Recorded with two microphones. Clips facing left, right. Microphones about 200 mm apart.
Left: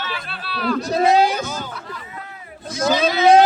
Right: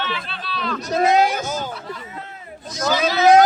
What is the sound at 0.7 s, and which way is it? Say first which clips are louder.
Speech: left 1 dB; 30° left (ahead or behind).